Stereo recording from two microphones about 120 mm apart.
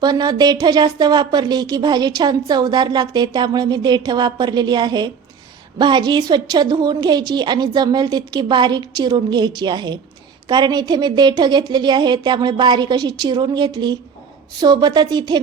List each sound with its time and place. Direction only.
0.0 s a woman's voice: 35° right (ahead or behind)